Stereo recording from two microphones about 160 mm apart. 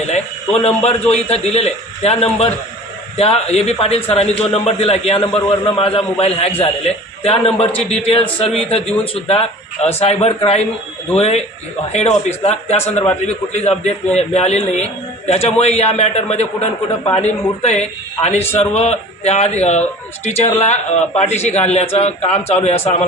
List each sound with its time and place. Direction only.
0.1 s a man's voice: 45° left (ahead or behind)